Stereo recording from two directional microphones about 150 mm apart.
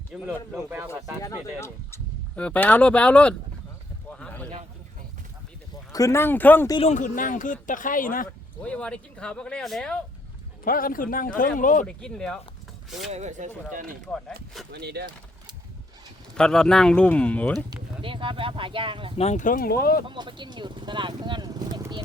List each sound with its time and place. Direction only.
0.1 s speech: centre (ahead or behind)
1.2 s speech: 20° left (ahead or behind)
4.2 s a sound: 10° left (ahead or behind)
5.9 s speech: 20° left (ahead or behind)
6.8 s speech: 55° left (ahead or behind)
8.6 s speech: 10° left (ahead or behind)
10.6 s speech: 70° left (ahead or behind)
11.9 s speech: 5° left (ahead or behind)
13.1 s speech: 50° right (ahead or behind)
14.7 s speech: 90° right
16.3 s speech: 5° left (ahead or behind)
18.0 s speech: 35° right (ahead or behind)
19.1 s speech: 45° left (ahead or behind); by 20.1 s 85° left
20.1 s speech: 30° right (ahead or behind)